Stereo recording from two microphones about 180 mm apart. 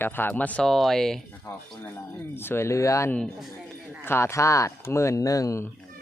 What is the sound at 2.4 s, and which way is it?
Speech, 15° left (ahead or behind).